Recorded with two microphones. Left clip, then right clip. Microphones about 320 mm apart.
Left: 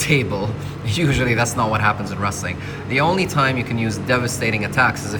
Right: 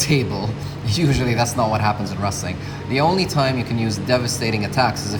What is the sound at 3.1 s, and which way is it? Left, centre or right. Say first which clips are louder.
Speech: left 1 dB; left.